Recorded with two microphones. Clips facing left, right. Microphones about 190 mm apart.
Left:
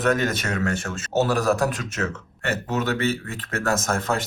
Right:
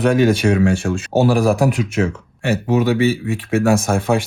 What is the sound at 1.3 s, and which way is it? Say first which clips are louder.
Speech: right 6 dB; 10° right (ahead or behind).